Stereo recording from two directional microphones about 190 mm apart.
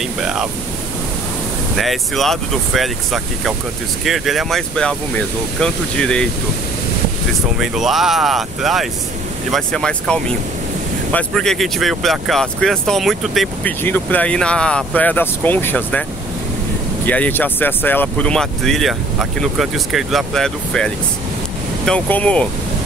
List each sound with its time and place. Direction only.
0.2 s speech: 5° right (ahead or behind)
1.8 s speech: centre (ahead or behind)
7.5 s speech: centre (ahead or behind)
17.0 s speech: 10° left (ahead or behind)